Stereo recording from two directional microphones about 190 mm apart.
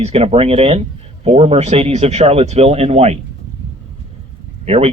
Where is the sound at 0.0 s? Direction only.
35° right (ahead or behind).